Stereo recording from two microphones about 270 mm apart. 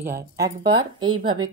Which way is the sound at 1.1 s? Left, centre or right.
Right.